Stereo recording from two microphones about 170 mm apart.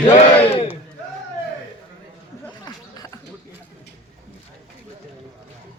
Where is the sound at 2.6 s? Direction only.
20° left (ahead or behind).